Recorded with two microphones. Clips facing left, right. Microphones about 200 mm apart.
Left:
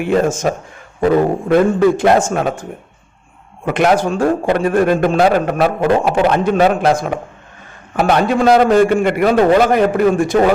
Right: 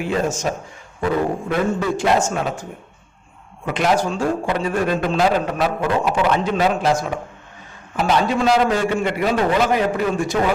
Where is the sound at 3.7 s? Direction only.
60° left (ahead or behind).